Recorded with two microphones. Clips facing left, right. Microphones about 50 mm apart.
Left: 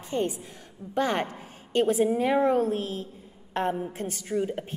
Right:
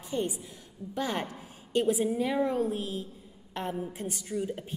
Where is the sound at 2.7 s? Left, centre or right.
Left.